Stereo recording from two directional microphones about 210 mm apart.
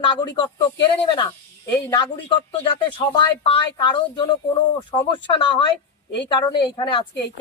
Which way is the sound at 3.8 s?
20° left (ahead or behind).